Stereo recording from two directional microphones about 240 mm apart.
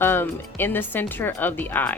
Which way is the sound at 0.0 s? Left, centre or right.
Centre.